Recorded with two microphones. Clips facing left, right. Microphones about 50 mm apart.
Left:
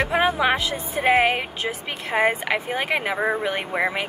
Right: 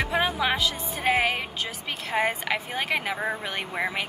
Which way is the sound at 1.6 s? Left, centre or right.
Left.